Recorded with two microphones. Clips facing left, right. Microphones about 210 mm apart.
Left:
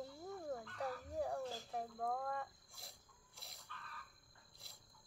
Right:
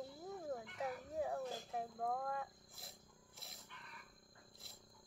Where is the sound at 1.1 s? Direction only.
Centre (ahead or behind).